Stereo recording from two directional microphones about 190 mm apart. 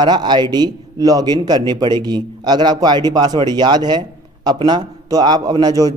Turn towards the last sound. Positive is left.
turn(degrees=-20)  # may be behind; listen again after turning